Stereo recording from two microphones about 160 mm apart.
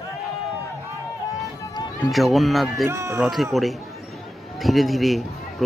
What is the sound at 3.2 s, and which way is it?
Speech, centre (ahead or behind).